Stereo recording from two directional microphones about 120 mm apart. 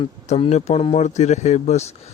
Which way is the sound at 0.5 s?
55° left (ahead or behind).